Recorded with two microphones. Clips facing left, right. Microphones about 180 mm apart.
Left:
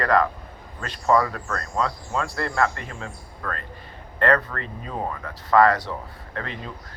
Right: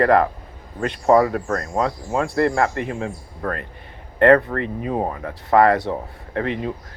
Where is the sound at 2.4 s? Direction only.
20° right (ahead or behind).